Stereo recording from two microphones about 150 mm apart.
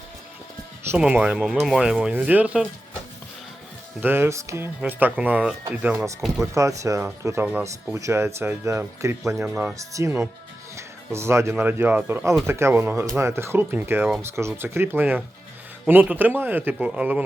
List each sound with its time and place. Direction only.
0.9 s speech: 10° right (ahead or behind)
4.0 s speech: 15° right (ahead or behind)
6.2 s speech: centre (ahead or behind)
6.5 s speech: 20° right (ahead or behind)